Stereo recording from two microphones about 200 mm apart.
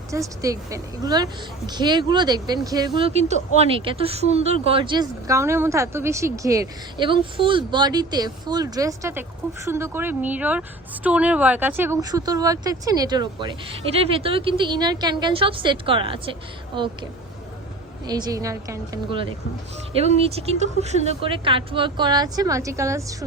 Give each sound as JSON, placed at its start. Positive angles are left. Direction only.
{"t": 0.1, "sound": "a woman's voice", "side_deg": -15}
{"t": 20.0, "sound": "a woman's voice", "side_deg": -30}